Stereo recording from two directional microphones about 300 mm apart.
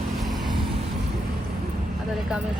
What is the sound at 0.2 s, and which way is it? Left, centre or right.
Vehicle, centre.